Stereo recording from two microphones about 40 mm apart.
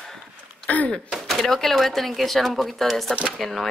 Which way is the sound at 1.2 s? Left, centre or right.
Centre.